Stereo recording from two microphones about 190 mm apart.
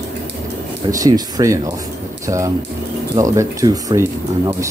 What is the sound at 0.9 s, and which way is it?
Speech, 20° right (ahead or behind).